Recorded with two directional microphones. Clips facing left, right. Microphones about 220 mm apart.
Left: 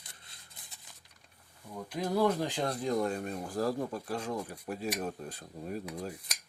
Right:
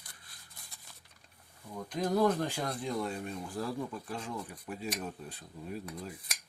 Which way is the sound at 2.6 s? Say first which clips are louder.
Left 4 dB; 40° left (ahead or behind).